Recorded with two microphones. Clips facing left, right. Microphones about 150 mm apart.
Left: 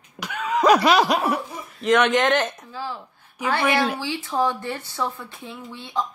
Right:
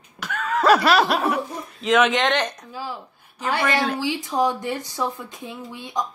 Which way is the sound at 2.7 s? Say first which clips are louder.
Even; 10° right (ahead or behind).